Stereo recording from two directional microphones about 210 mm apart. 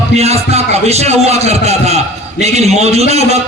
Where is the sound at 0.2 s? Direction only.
30° right (ahead or behind).